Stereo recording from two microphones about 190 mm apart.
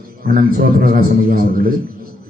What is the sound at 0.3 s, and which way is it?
A man's voice, 50° right (ahead or behind).